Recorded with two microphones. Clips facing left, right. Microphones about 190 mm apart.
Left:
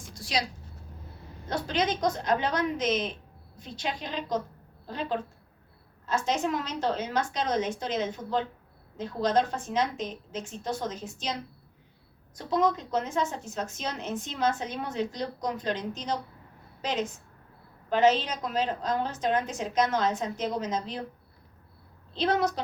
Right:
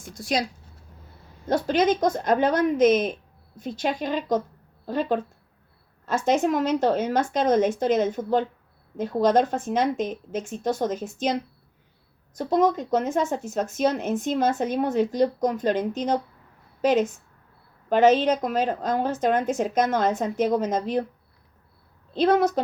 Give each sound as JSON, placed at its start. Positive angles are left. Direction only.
{"t": 0.1, "sound": "speech", "side_deg": -50}
{"t": 1.5, "sound": "speech", "side_deg": -50}
{"t": 22.1, "sound": "speech", "side_deg": -50}